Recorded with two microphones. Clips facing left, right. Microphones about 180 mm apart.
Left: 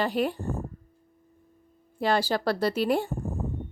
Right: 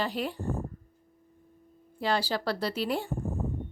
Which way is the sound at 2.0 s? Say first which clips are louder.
Left 4 dB; 50° left (ahead or behind).